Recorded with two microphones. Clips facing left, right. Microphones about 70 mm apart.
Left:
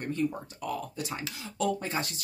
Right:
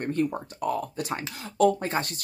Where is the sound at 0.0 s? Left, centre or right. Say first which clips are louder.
Right 4 dB; right.